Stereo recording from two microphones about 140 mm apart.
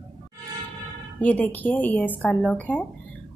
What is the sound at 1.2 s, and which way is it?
Speech, 10° left (ahead or behind).